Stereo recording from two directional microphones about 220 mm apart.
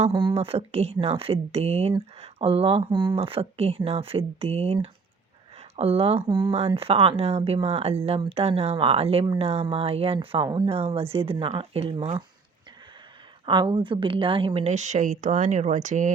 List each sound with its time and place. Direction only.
0.0 s a woman's voice: 20° right (ahead or behind)
13.4 s a woman's voice: 20° right (ahead or behind)